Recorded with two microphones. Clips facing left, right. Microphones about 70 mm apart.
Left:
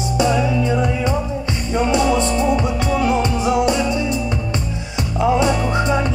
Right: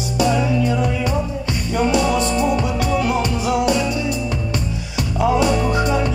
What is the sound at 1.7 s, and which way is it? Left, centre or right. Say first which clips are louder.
Music: left 1 dB; left.